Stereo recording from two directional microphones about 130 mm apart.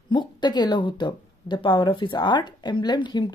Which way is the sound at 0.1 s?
35° left (ahead or behind).